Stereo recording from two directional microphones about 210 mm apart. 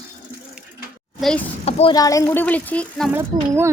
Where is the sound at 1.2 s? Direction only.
Centre (ahead or behind).